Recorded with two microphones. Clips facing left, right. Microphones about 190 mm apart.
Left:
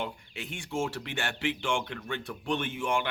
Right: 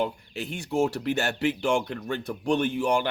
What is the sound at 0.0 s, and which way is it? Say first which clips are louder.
A man's voice: right 8 dB; 40° right (ahead or behind).